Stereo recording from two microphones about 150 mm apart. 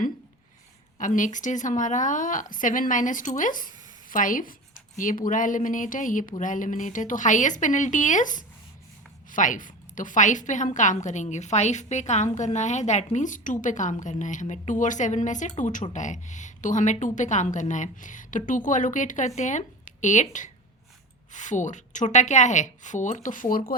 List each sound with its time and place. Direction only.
0.9 s a woman's voice: 60° left (ahead or behind)